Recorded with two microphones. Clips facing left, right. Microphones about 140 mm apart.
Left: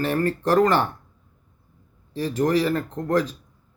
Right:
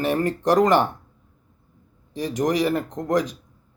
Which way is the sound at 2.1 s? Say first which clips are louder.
Left 1 dB; 15° right (ahead or behind).